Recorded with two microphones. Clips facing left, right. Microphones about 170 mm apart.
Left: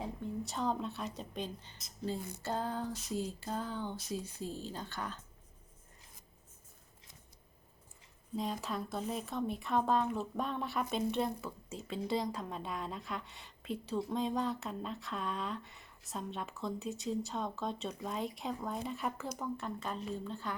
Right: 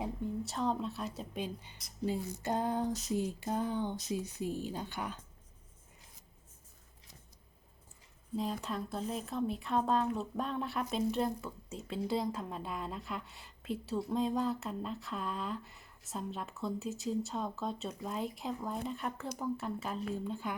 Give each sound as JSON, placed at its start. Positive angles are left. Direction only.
{"t": 0.4, "sound": "a woman's voice", "side_deg": 0}
{"t": 8.4, "sound": "a woman's voice", "side_deg": 0}